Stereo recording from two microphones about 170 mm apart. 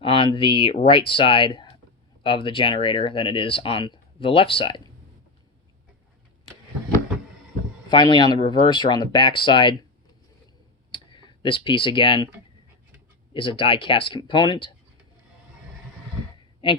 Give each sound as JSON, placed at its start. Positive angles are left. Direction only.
{"t": 0.0, "sound": "speech", "side_deg": 30}
{"t": 7.9, "sound": "speech", "side_deg": 25}
{"t": 10.9, "sound": "speech", "side_deg": 30}
{"t": 13.3, "sound": "speech", "side_deg": 30}